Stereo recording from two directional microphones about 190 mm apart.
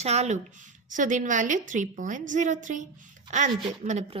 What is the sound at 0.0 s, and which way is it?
A woman's voice, 35° right (ahead or behind).